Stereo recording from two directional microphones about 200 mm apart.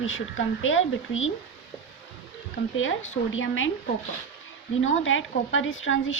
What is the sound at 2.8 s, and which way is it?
Speech, 80° left.